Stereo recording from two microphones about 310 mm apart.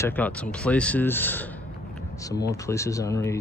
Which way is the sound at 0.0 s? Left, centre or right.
Centre.